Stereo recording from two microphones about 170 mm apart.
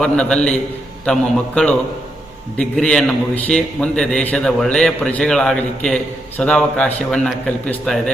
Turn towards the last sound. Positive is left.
turn(degrees=5)  # may be behind; listen again after turning